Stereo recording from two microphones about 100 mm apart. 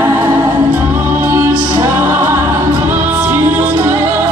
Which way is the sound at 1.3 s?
30° right (ahead or behind).